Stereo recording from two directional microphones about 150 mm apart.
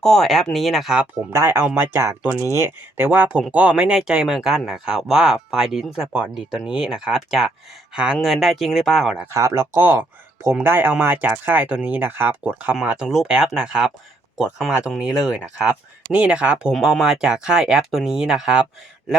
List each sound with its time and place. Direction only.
0.0 s speech: 5° left (ahead or behind)
1.3 s speech: 15° right (ahead or behind); by 9.2 s centre (ahead or behind)
9.2 s speech: 20° right (ahead or behind); by 18.6 s 5° right (ahead or behind)